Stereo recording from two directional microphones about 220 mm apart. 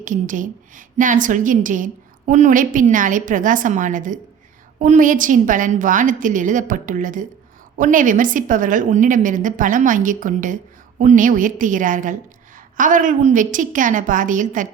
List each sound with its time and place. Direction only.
0.0 s a woman's voice: 35° right (ahead or behind)